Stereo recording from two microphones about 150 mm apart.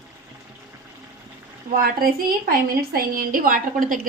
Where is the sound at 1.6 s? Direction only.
75° right (ahead or behind).